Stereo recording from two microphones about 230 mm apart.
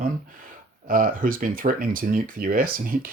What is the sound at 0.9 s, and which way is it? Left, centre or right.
Speech, right.